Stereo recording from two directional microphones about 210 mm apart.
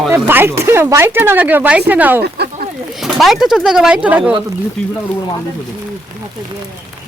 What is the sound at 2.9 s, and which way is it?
Speech, centre (ahead or behind).